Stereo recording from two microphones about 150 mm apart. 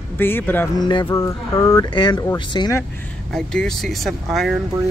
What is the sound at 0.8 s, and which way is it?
Speech, 30° left (ahead or behind).